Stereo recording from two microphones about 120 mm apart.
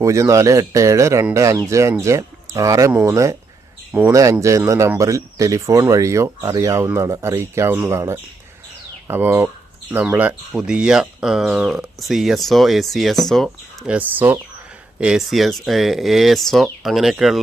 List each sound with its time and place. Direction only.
0.0 s speech: 25° right (ahead or behind); by 13.5 s 5° left (ahead or behind)
13.8 s speech: 10° right (ahead or behind)
15.0 s speech: 5° right (ahead or behind)